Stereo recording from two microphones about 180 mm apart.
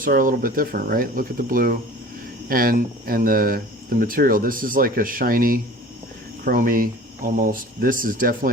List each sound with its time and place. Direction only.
0.0 s speech: 50° right (ahead or behind)